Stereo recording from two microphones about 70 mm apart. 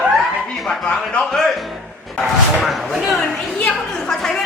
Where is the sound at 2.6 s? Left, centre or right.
Centre.